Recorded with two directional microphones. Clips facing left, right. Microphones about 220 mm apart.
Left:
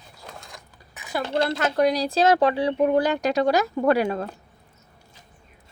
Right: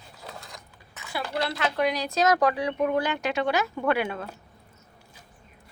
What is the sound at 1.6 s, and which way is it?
Speech, 45° left (ahead or behind).